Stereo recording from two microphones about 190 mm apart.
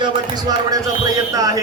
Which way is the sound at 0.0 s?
20° right (ahead or behind).